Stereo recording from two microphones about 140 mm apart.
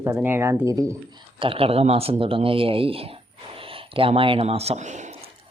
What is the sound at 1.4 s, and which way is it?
Speech, 40° right (ahead or behind).